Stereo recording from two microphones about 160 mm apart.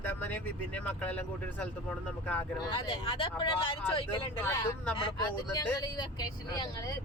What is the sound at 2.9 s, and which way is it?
Speech, 30° left (ahead or behind).